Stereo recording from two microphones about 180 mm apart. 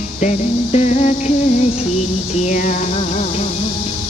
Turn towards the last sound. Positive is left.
turn(degrees=45)  # may be behind; listen again after turning